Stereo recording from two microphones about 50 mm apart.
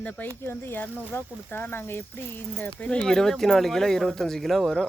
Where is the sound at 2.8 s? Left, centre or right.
Left.